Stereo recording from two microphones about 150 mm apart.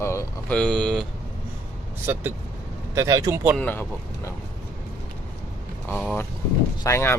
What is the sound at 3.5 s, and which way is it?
Speech, 15° left (ahead or behind).